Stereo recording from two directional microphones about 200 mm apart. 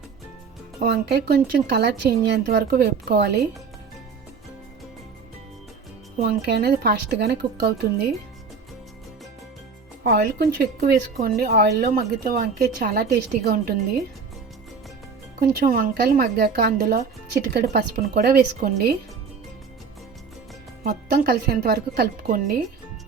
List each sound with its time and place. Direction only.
0.8 s a woman's voice: 55° right (ahead or behind)
6.2 s a woman's voice: 55° right (ahead or behind)
10.0 s a woman's voice: 50° right (ahead or behind)
15.4 s a woman's voice: 45° right (ahead or behind)
20.8 s a woman's voice: 50° right (ahead or behind)